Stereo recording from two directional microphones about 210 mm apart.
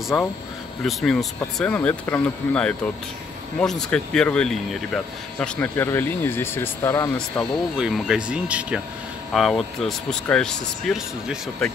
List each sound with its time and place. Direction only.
0.1 s speech: centre (ahead or behind)
7.2 s speech: centre (ahead or behind)